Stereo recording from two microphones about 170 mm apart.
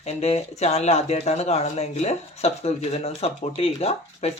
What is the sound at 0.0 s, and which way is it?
Speech, 40° left (ahead or behind).